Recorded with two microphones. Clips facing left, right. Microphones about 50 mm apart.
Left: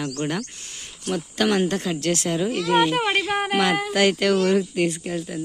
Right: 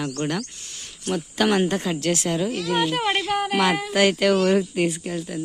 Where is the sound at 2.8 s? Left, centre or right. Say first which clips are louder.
Left 2 dB; centre.